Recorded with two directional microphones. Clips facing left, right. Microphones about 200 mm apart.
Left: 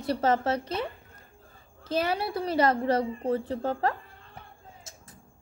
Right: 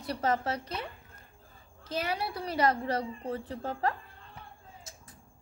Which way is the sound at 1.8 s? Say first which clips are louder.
Left 5 dB; 30° left (ahead or behind).